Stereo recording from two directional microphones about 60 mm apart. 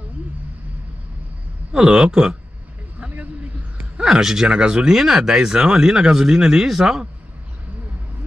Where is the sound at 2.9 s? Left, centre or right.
Right.